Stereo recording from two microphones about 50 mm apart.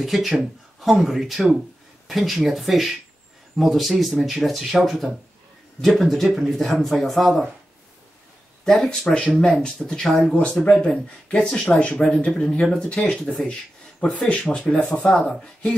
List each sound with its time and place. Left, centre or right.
0.0 s speech: centre
8.6 s speech: centre
10.3 s speech: left